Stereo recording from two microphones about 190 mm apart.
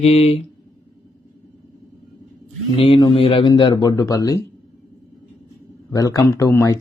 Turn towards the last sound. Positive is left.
turn(degrees=15)  # may be behind; listen again after turning